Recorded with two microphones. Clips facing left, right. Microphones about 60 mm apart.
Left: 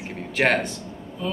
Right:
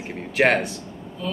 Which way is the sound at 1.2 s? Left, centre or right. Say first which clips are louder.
Left 1 dB; centre.